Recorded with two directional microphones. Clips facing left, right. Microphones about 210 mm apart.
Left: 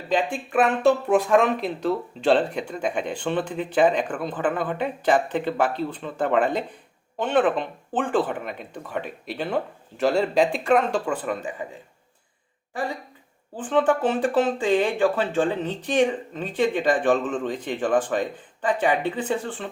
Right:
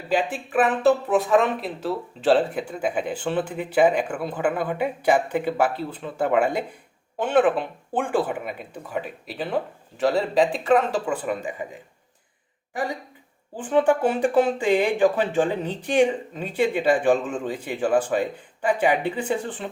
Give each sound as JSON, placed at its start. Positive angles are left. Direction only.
{"t": 0.1, "sound": "speech", "side_deg": -5}
{"t": 12.7, "sound": "speech", "side_deg": -15}